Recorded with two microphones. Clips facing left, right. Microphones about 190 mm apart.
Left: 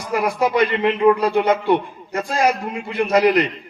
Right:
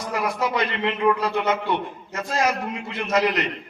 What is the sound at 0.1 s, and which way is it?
A man's voice, 30° left (ahead or behind).